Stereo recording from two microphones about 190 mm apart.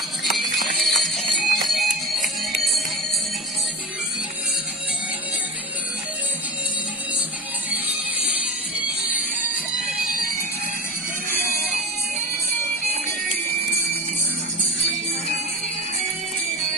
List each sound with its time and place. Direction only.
0.3 s music: centre (ahead or behind)
11.3 s music: 45° left (ahead or behind)